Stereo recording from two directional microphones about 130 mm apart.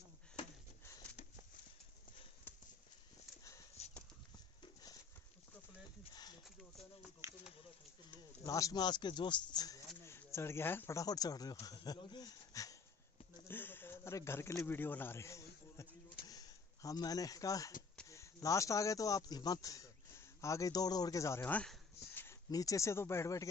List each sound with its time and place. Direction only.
2.5 s clip-clop: 15° left (ahead or behind)
3.8 s clip-clop: 55° left (ahead or behind)
6.1 s a sound: 30° left (ahead or behind)
7.2 s a sound: 25° right (ahead or behind)
8.5 s speech: 25° left (ahead or behind)
10.0 s speech: 20° left (ahead or behind)
13.5 s a sound: 15° left (ahead or behind)
18.0 s speech: 25° left (ahead or behind)
22.5 s speech: 25° left (ahead or behind)